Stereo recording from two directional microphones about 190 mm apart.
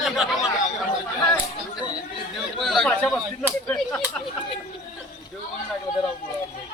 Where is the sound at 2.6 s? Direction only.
Centre (ahead or behind).